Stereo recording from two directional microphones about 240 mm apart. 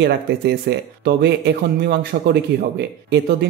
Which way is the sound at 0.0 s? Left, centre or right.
Right.